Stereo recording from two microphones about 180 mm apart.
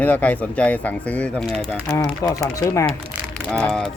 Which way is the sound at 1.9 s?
20° left (ahead or behind).